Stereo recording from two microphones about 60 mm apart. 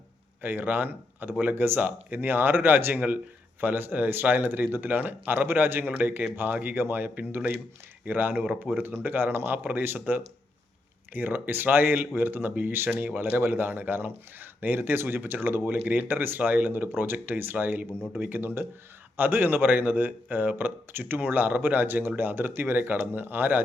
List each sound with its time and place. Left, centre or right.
0.4 s speech: right